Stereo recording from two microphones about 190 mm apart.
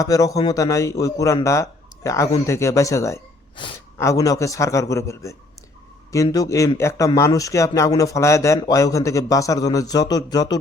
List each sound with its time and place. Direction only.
0.0 s speech: 15° left (ahead or behind)